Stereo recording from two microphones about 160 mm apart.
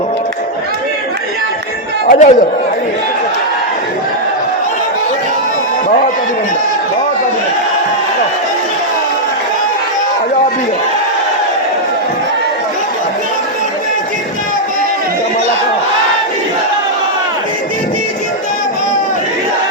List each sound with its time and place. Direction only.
2.0 s speech: 50° left (ahead or behind)